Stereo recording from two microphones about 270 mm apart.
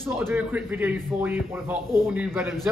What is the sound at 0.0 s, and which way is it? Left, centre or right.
Speech, centre.